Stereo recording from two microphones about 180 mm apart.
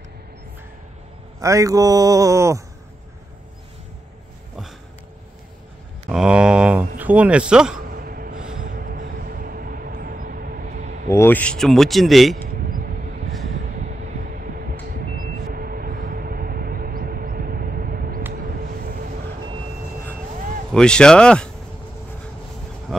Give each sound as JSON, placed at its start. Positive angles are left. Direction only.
{"t": 1.4, "sound": "speech", "side_deg": -15}
{"t": 6.0, "sound": "mantra", "side_deg": -5}
{"t": 7.0, "sound": "speech", "side_deg": -10}
{"t": 7.9, "sound": "gasp", "side_deg": -55}
{"t": 8.6, "sound": "music", "side_deg": -50}
{"t": 11.1, "sound": "speech", "side_deg": 15}
{"t": 12.6, "sound": "vehicle", "side_deg": -50}
{"t": 14.4, "sound": "a sound", "side_deg": -55}
{"t": 20.7, "sound": "speech", "side_deg": 5}